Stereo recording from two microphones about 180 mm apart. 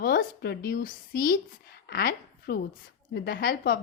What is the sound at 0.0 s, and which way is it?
A woman's voice, 60° left (ahead or behind).